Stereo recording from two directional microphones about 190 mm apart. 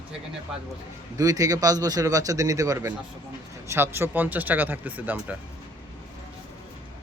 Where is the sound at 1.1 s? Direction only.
20° right (ahead or behind).